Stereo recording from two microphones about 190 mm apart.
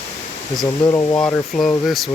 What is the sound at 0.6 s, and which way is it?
Speech, 20° left (ahead or behind).